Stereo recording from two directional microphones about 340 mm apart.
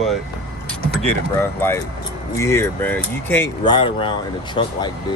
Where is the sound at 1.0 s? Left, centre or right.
Centre.